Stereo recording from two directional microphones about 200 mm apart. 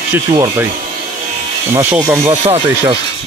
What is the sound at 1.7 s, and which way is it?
Speech, 10° right (ahead or behind).